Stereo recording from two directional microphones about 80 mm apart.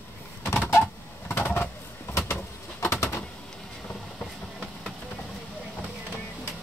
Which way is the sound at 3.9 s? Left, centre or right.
Centre.